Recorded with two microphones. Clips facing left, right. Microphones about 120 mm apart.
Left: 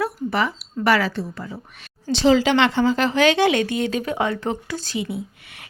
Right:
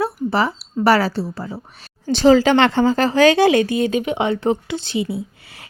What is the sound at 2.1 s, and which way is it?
Speech, 45° right (ahead or behind).